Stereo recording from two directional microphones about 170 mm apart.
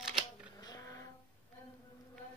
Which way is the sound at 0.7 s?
20° left (ahead or behind).